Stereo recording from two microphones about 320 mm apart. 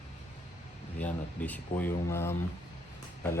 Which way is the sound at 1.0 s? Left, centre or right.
Centre.